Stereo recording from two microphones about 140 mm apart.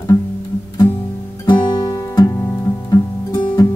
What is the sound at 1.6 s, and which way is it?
Music, 30° left (ahead or behind).